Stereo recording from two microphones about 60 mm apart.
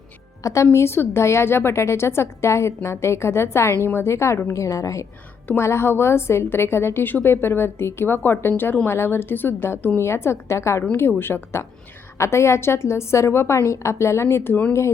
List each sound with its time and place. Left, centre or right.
0.4 s a woman's voice: left
4.4 s a woman's voice: left
5.5 s a woman's voice: left
8.9 s a woman's voice: left
11.2 s a woman's voice: left
12.1 s a woman's voice: left